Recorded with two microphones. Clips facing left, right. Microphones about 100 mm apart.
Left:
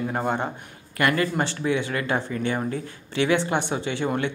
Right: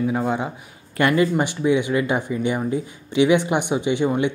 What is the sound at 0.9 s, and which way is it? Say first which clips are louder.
Speech: right 5 dB; 20° right (ahead or behind).